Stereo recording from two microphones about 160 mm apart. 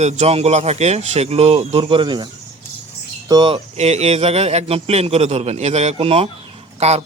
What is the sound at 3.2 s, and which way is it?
A man's voice, 30° right (ahead or behind).